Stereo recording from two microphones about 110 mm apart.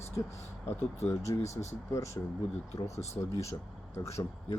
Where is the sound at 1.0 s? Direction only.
25° left (ahead or behind).